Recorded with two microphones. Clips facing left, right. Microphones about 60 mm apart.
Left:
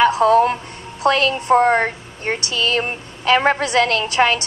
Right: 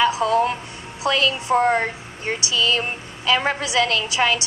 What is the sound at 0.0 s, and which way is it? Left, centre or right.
Music, left.